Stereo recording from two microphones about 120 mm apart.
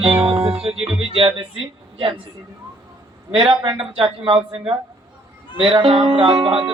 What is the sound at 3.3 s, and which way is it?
Music, 50° right (ahead or behind).